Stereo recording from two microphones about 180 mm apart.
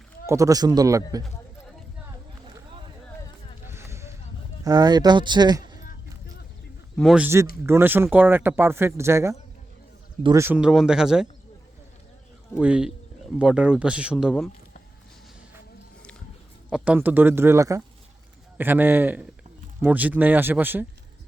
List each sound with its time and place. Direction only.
0.3 s speech: 15° right (ahead or behind)
3.7 s a sound: 15° right (ahead or behind)
4.6 s speech: 20° right (ahead or behind)
6.9 s speech: centre (ahead or behind)
7.6 s speech: 10° right (ahead or behind)
12.5 s speech: 5° right (ahead or behind)
16.6 s speech: 5° right (ahead or behind)